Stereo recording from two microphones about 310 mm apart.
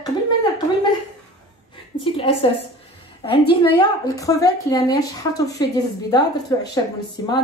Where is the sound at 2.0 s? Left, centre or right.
Centre.